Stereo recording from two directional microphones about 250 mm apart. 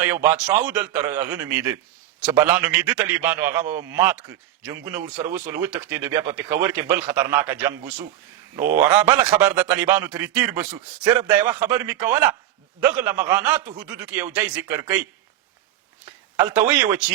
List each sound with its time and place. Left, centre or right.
0.0 s a man's voice: centre
16.0 s speech: centre